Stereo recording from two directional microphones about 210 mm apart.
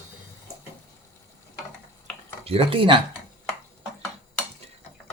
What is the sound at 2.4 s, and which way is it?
Speech, 30° right (ahead or behind).